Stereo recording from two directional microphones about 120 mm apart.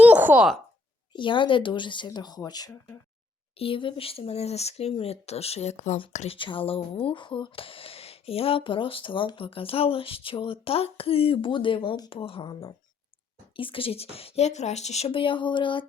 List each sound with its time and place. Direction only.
0.0 s a sound: 15° right (ahead or behind)
1.1 s speech: 40° left (ahead or behind)
3.6 s speech: 45° left (ahead or behind); by 6.0 s 75° left (ahead or behind)
6.1 s speech: 50° left (ahead or behind)